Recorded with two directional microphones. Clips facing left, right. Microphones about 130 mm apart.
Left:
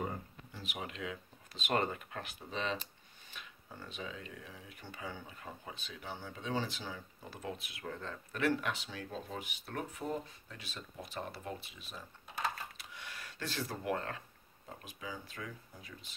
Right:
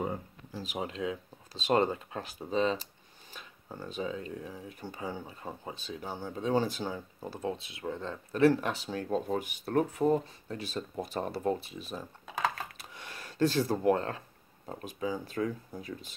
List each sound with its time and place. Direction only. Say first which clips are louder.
0.5 s speech: right 8 dB; 35° right (ahead or behind)
12.4 s typing: right 6 dB; 90° right
12.7 s a sound: right 3 dB; 40° right (ahead or behind)
14.7 s speech: right 11 dB; 40° right (ahead or behind)